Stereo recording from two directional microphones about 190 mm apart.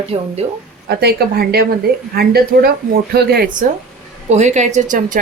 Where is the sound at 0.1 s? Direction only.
30° right (ahead or behind).